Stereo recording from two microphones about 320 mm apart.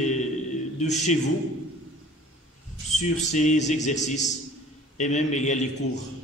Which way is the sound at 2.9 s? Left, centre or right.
Left.